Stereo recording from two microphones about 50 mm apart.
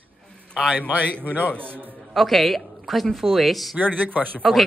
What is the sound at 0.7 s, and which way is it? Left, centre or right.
Speech, right.